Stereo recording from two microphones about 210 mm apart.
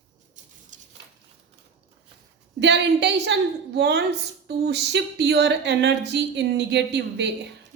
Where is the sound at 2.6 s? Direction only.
55° right (ahead or behind).